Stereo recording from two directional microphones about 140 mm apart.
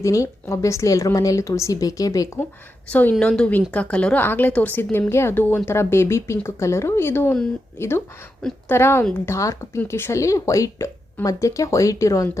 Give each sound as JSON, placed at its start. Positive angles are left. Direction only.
{"t": 0.0, "sound": "speech", "side_deg": 20}
{"t": 2.9, "sound": "speech", "side_deg": 10}